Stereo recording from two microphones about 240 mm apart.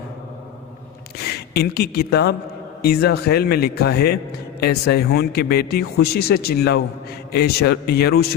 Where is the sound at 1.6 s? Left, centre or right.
Left.